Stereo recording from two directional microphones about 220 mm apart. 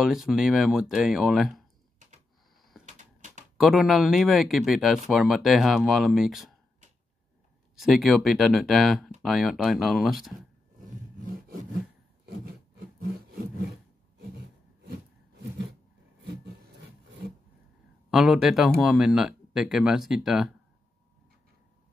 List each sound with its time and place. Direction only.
0.0 s speech: centre (ahead or behind)
2.8 s typewriter: 35° right (ahead or behind)
3.5 s speech: centre (ahead or behind)
7.7 s speech: centre (ahead or behind)
18.1 s speech: centre (ahead or behind)